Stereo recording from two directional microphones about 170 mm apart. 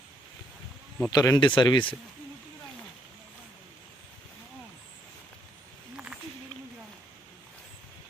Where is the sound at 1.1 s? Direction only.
15° left (ahead or behind).